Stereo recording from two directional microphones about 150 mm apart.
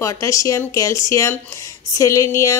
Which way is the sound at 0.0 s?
20° left (ahead or behind).